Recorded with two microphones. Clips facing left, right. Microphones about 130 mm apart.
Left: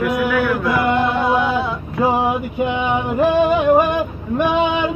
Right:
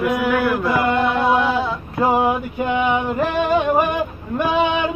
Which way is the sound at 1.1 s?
Centre (ahead or behind).